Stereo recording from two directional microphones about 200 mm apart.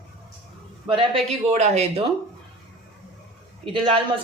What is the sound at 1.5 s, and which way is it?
Speech, 35° right (ahead or behind).